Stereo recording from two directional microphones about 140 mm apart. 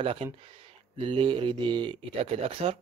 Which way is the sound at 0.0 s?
40° right (ahead or behind).